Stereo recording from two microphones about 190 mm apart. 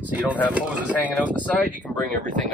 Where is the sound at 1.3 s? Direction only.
5° left (ahead or behind).